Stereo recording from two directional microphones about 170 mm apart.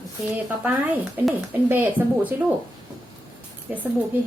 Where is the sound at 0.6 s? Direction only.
10° right (ahead or behind).